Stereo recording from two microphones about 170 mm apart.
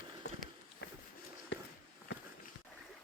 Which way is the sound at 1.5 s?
90° left.